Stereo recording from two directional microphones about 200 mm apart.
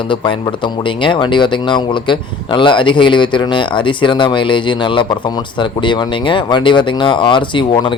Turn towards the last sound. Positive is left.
turn(degrees=25)  # may be behind; listen again after turning